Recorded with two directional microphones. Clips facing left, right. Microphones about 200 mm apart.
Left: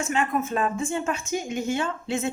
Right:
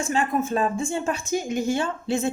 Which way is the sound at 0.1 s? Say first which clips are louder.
Right 3 dB; 35° right (ahead or behind).